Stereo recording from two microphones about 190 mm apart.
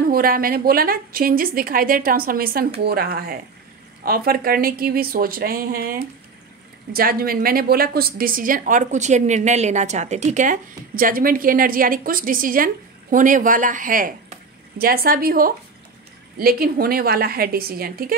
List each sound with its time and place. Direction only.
0.1 s a woman's voice: 50° right (ahead or behind)